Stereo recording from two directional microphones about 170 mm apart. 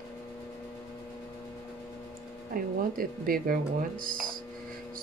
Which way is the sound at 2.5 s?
55° right (ahead or behind).